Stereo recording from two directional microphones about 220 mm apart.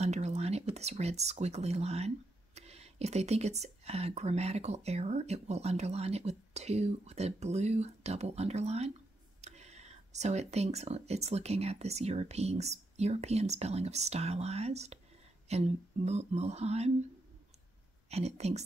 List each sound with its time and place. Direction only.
0.0 s speech: 30° right (ahead or behind)
18.1 s speech: 30° right (ahead or behind)